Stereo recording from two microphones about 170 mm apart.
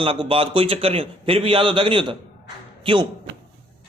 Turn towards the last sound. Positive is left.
turn(degrees=-30)  # may be behind; listen again after turning